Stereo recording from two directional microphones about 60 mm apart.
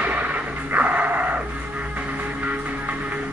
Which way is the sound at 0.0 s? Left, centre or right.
Right.